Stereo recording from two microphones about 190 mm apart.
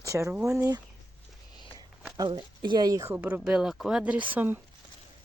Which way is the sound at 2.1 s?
20° right (ahead or behind).